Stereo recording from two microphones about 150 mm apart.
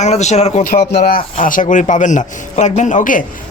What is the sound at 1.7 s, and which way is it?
A man's voice, 55° left (ahead or behind).